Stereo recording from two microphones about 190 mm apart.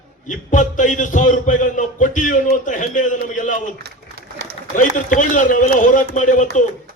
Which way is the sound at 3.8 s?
60° right (ahead or behind).